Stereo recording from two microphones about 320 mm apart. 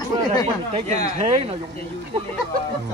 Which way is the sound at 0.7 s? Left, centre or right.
Centre.